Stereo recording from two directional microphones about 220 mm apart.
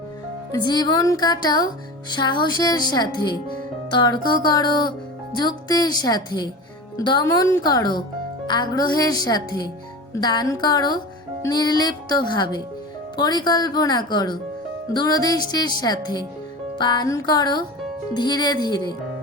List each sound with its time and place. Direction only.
0.7 s a woman's voice: 20° left (ahead or behind)